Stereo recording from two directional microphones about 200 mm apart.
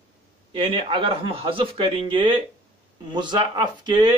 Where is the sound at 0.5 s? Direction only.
25° right (ahead or behind).